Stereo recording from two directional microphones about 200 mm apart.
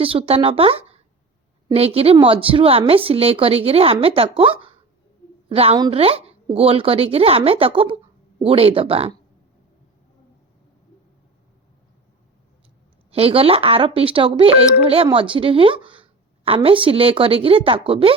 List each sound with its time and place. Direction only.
0.0 s speech: 25° right (ahead or behind)
13.1 s speech: 30° right (ahead or behind)